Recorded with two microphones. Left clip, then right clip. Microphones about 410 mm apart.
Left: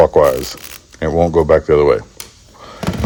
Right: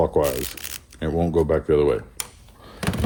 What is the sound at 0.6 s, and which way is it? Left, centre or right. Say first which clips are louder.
Speech: left 8 dB; centre.